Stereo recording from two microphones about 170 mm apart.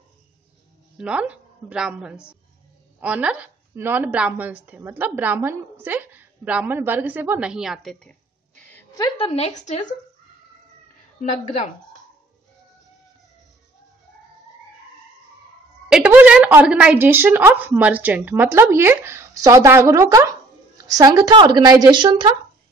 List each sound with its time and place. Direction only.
0.9 s a woman's voice: 5° right (ahead or behind)
8.9 s a woman's voice: 25° left (ahead or behind)
9.3 s a woman's voice: 40° left (ahead or behind)
11.1 s a woman's voice: 45° left (ahead or behind)
15.9 s a woman's voice: 10° right (ahead or behind); by 22.3 s 25° right (ahead or behind)